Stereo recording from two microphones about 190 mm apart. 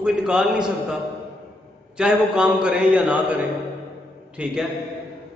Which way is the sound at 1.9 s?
5° right (ahead or behind).